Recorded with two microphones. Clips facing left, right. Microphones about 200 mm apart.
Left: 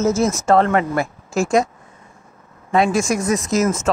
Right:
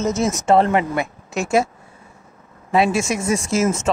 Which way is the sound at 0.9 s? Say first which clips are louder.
Left 3 dB; centre (ahead or behind).